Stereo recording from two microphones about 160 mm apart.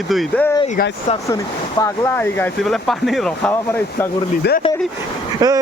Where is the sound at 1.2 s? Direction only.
20° left (ahead or behind).